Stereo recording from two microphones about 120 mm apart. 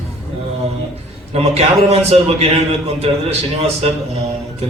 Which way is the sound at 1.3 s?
60° right (ahead or behind).